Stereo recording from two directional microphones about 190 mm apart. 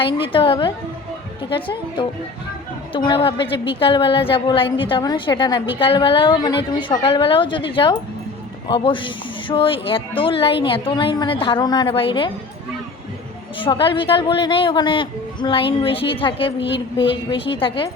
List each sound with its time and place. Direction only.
0.0 s a woman's voice: 25° left (ahead or behind)
13.6 s a woman's voice: 25° left (ahead or behind)